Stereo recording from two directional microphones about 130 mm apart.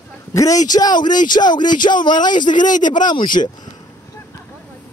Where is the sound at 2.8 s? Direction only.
35° left (ahead or behind).